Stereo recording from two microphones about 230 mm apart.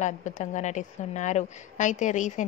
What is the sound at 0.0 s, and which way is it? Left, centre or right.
A woman's voice, left.